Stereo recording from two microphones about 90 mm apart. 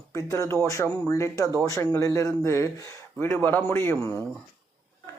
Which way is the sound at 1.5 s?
40° right (ahead or behind).